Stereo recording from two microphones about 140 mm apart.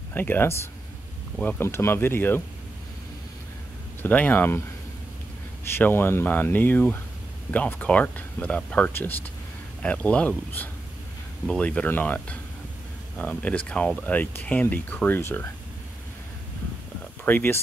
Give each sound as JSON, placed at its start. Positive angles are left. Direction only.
{"t": 0.1, "sound": "speech", "side_deg": 15}
{"t": 4.0, "sound": "speech", "side_deg": 10}
{"t": 5.7, "sound": "speech", "side_deg": 15}
{"t": 17.2, "sound": "speech", "side_deg": 15}